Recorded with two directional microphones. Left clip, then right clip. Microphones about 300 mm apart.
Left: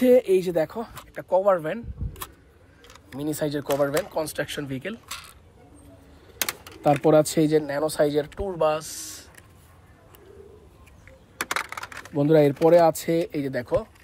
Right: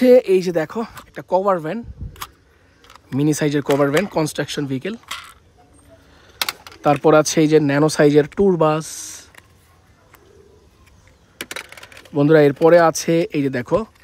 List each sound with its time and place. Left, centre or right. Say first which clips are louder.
0.0 s speech: right 6 dB; right
3.3 s speech: right 7 dB; right
6.2 s a sound: right 6 dB; centre
6.8 s speech: right 5 dB; right
11.5 s coin: left 4 dB; centre
12.1 s speech: right 6 dB; right